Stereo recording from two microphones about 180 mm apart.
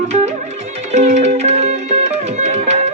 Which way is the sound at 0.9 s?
40° right (ahead or behind).